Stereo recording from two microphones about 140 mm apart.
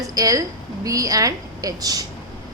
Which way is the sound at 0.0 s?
25° right (ahead or behind).